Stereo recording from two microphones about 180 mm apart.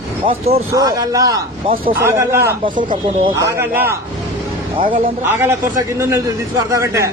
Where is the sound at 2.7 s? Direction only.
25° right (ahead or behind).